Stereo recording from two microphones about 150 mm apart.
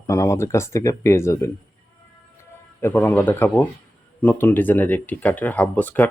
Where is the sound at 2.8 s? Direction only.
15° left (ahead or behind).